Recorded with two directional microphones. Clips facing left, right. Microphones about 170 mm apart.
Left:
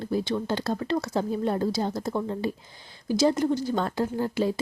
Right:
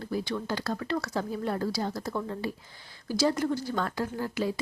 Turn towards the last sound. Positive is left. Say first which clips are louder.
# left 5 dB
turn(degrees=25)  # may be behind; listen again after turning